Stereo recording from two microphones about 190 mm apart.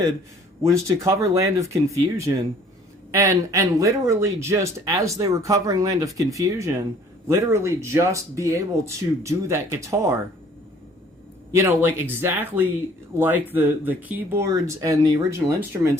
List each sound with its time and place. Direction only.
0.6 s a man's voice: 15° right (ahead or behind)
11.5 s a man's voice: 10° right (ahead or behind)